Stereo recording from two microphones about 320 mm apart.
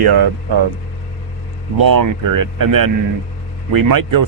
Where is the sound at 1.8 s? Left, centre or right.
Right.